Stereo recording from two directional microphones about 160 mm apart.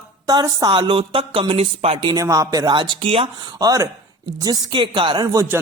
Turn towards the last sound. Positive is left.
turn(degrees=-20)  # may be behind; listen again after turning